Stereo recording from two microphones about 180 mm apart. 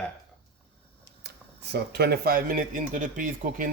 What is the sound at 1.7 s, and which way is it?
Speech, 65° right (ahead or behind).